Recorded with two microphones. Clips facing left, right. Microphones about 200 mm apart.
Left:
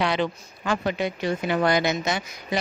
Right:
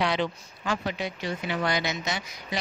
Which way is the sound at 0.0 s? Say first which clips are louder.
Left 2 dB; 55° left (ahead or behind).